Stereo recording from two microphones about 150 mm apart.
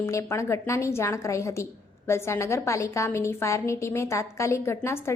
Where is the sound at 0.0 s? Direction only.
20° left (ahead or behind).